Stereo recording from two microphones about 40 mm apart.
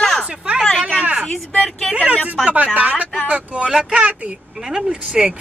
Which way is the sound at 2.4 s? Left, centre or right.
Centre.